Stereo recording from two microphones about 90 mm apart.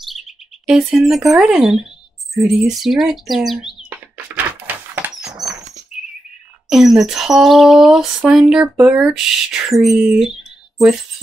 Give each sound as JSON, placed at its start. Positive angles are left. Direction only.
{"t": 0.1, "sound": "speech", "side_deg": -5}
{"t": 4.4, "sound": "a sound", "side_deg": -20}
{"t": 6.7, "sound": "speech", "side_deg": -5}